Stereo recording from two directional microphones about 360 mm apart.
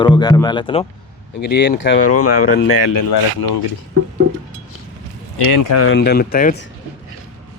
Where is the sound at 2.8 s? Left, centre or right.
Left.